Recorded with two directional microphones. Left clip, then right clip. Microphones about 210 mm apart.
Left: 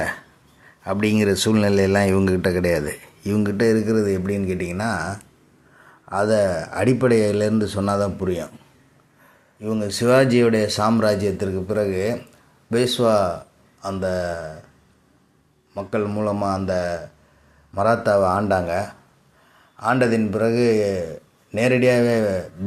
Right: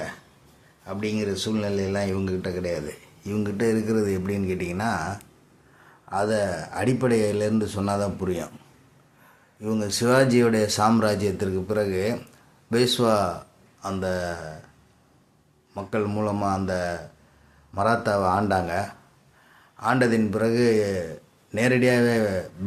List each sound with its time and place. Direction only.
0.9 s a man's voice: 30° left (ahead or behind); by 14.6 s 5° left (ahead or behind)
15.7 s a man's voice: centre (ahead or behind)